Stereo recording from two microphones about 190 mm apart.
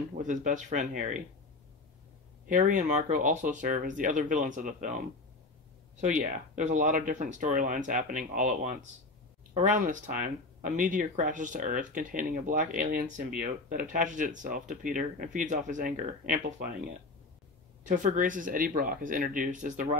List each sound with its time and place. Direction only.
0.2 s speech: 40° right (ahead or behind)
2.4 s speech: 45° right (ahead or behind)